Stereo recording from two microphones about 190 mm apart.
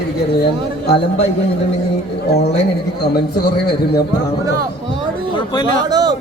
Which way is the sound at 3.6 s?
55° left (ahead or behind).